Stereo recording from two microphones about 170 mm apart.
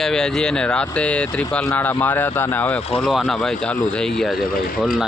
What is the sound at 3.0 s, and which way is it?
Speech, centre (ahead or behind).